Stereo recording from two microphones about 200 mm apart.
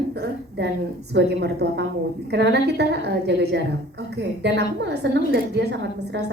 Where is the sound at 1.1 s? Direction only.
55° right (ahead or behind).